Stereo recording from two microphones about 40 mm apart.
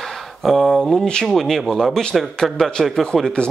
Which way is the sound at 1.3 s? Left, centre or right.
Centre.